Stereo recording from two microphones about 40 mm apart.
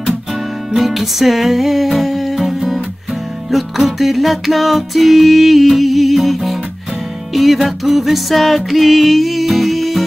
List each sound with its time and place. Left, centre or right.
0.7 s music: centre